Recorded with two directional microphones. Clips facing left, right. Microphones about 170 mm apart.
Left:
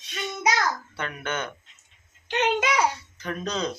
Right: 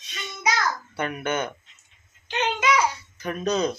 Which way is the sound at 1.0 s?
15° right (ahead or behind).